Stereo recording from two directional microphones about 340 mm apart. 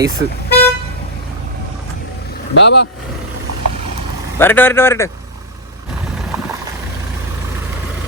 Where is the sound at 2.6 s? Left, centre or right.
Left.